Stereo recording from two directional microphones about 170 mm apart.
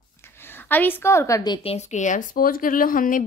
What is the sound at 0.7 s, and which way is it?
A woman's voice, 10° left (ahead or behind).